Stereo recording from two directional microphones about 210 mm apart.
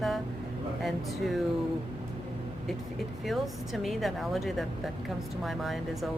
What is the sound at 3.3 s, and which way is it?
A woman's voice, centre (ahead or behind).